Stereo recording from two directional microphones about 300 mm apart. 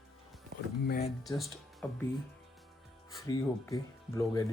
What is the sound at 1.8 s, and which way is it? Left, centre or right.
Speech, centre.